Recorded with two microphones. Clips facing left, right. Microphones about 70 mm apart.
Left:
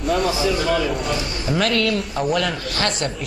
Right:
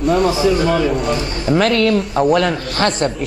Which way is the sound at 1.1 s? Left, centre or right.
Right.